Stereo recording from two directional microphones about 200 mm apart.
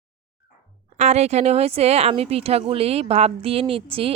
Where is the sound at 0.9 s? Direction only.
35° right (ahead or behind).